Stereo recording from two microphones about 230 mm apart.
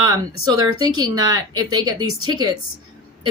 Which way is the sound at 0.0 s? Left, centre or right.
Centre.